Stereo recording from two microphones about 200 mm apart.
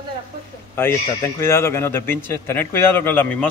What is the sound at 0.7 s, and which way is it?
A man's voice, 10° left (ahead or behind).